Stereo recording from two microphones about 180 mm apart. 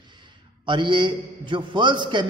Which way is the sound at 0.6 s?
25° right (ahead or behind).